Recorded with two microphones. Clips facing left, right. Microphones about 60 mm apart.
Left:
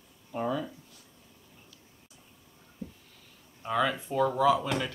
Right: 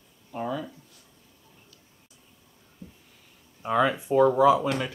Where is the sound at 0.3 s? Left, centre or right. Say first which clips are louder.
Even; centre.